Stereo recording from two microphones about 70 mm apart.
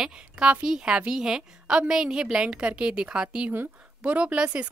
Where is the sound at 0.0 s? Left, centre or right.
Centre.